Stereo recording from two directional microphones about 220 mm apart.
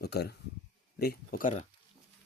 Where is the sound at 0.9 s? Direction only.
45° left (ahead or behind).